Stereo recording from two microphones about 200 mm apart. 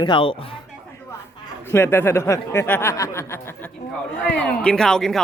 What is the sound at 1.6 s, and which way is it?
Speech, 10° left (ahead or behind).